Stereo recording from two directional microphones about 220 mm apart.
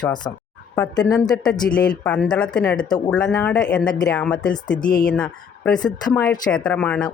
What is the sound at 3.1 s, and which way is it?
Speech, 5° left (ahead or behind).